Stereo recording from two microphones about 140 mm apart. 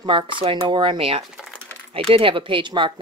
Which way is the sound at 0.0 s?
35° right (ahead or behind).